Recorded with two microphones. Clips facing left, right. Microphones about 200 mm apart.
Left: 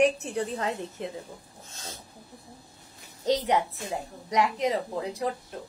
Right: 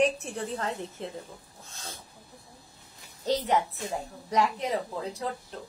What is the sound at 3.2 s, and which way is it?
Speech, 15° left (ahead or behind).